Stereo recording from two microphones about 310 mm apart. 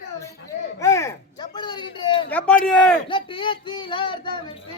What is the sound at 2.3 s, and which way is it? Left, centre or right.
Speech, centre.